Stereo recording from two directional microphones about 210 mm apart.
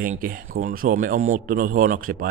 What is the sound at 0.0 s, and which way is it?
Speech, 40° right (ahead or behind).